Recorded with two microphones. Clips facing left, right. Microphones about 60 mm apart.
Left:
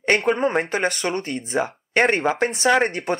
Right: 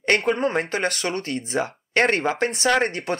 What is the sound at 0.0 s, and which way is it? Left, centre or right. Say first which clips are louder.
Speech: left 1 dB; centre.